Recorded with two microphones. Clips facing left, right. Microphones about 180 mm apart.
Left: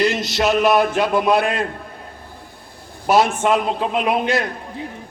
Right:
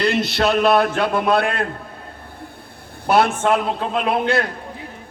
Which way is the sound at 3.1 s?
60° right (ahead or behind).